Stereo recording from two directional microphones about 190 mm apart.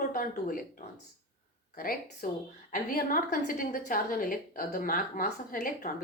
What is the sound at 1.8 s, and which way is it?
A woman's voice, 50° left (ahead or behind).